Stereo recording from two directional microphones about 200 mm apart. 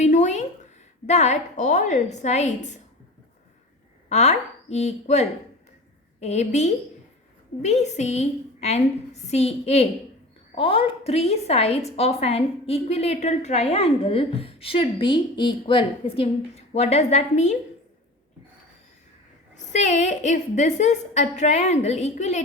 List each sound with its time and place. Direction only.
0.0 s a sound: 35° left (ahead or behind)
1.0 s a woman's voice: 35° left (ahead or behind)
4.1 s a woman's voice: 35° left (ahead or behind)
19.5 s a woman's voice: 35° left (ahead or behind)